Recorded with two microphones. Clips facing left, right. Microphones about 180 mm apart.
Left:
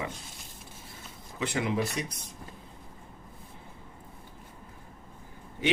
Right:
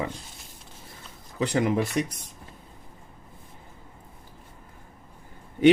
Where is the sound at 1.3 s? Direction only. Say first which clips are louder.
Right 7 dB; 40° right (ahead or behind).